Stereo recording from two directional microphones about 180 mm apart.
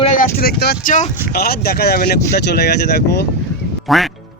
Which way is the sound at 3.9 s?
Centre (ahead or behind).